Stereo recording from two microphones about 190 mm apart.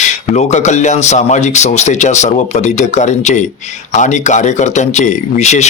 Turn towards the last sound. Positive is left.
turn(degrees=35)  # may be behind; listen again after turning